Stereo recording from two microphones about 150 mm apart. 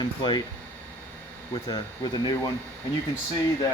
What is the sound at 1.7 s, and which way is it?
Speech, 30° left (ahead or behind).